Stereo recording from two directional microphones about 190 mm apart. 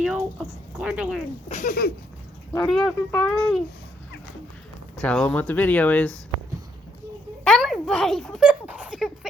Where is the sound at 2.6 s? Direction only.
Centre (ahead or behind).